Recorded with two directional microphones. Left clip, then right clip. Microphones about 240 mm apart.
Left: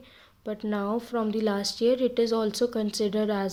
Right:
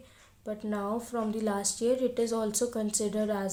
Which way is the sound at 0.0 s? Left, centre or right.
Left.